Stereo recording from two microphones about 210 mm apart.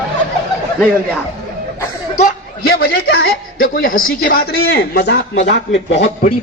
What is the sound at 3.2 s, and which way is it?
A man's voice, 40° left (ahead or behind).